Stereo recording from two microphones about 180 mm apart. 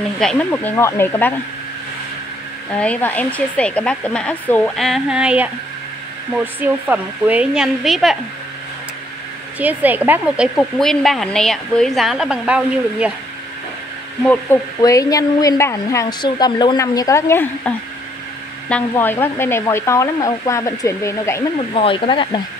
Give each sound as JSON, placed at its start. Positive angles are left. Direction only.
{"t": 0.2, "sound": "speech", "side_deg": 5}
{"t": 2.7, "sound": "speech", "side_deg": 5}
{"t": 9.6, "sound": "speech", "side_deg": -10}
{"t": 14.2, "sound": "speech", "side_deg": 10}
{"t": 14.8, "sound": "a woman's voice", "side_deg": 20}
{"t": 21.7, "sound": "a woman's voice", "side_deg": 30}